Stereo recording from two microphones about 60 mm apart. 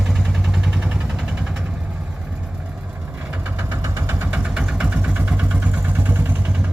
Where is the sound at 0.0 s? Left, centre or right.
Centre.